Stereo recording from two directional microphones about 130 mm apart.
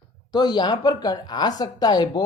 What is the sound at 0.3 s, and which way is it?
Speech, 35° left (ahead or behind).